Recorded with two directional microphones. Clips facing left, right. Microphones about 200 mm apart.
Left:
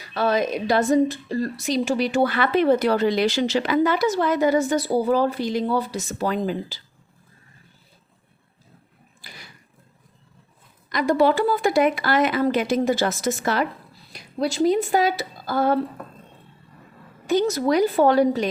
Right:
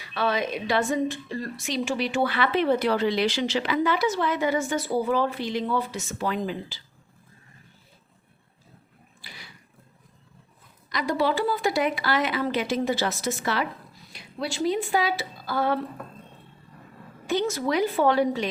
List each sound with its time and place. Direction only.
0.0 s a woman's voice: 40° left (ahead or behind)
9.2 s a sound: 45° left (ahead or behind)
10.8 s speech: 50° left (ahead or behind)
17.2 s a woman's voice: 40° left (ahead or behind)